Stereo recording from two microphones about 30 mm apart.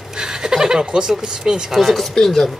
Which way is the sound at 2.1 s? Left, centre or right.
Centre.